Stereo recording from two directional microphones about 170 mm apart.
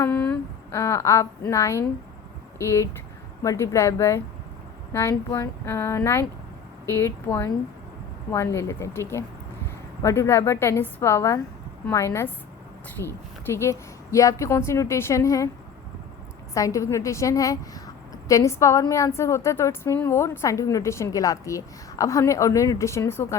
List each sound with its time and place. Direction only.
0.0 s a sound: 5° left (ahead or behind)
0.8 s a woman's voice: 15° left (ahead or behind)
16.6 s a woman's voice: 20° left (ahead or behind)